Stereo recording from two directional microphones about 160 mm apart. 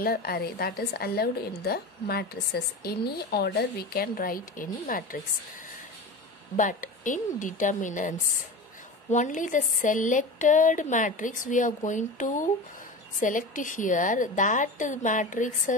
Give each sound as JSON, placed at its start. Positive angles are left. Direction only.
{"t": 0.0, "sound": "a woman's voice", "side_deg": 70}
{"t": 6.5, "sound": "speech", "side_deg": 55}